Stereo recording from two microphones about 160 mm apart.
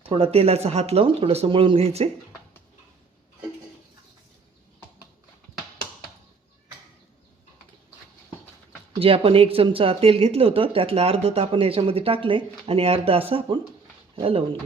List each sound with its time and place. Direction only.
0.0 s speech: 35° right (ahead or behind)
9.0 s speech: 35° right (ahead or behind)